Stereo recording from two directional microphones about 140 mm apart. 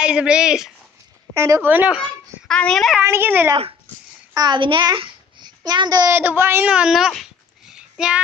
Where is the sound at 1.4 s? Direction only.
20° right (ahead or behind).